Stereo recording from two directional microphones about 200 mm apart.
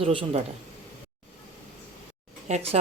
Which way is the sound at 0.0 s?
25° right (ahead or behind).